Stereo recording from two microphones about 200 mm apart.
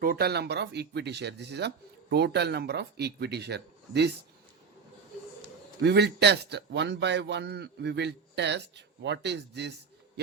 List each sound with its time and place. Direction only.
0.0 s speech: 50° right (ahead or behind)
5.8 s speech: 55° right (ahead or behind)